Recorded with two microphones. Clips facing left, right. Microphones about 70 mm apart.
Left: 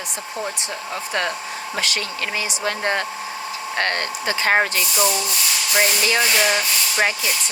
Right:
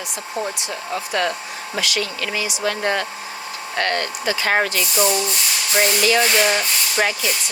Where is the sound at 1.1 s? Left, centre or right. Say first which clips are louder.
Right 1 dB; left.